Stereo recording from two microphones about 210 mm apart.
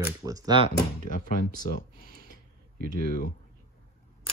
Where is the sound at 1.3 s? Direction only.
40° left (ahead or behind).